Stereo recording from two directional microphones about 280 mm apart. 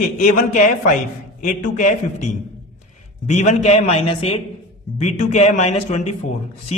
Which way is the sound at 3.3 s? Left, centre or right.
Left.